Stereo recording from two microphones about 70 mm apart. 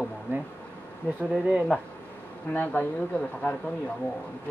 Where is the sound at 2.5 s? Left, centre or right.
Left.